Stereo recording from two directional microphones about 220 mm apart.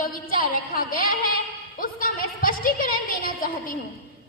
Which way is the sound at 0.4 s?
40° left (ahead or behind).